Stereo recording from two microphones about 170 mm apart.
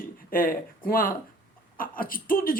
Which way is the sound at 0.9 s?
60° left (ahead or behind).